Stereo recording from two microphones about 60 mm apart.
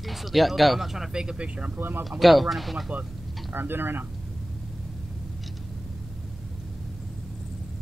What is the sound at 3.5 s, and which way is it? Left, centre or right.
Speech, right.